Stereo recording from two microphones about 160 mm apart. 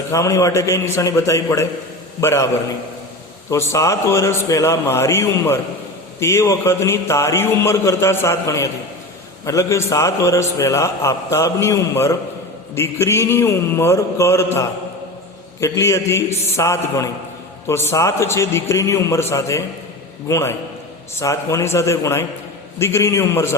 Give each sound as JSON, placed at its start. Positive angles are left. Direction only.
{"t": 0.1, "sound": "a man's voice", "side_deg": 20}